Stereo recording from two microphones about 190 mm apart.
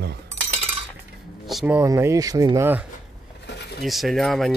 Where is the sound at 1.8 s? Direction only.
15° right (ahead or behind).